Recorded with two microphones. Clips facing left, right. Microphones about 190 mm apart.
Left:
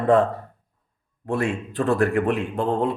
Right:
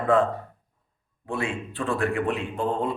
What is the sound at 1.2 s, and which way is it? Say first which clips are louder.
Speech: left 5 dB; 45° left (ahead or behind).